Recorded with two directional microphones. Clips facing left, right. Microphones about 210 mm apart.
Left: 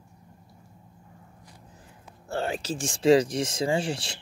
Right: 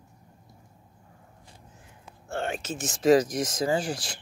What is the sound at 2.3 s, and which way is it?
Speech, 35° left (ahead or behind).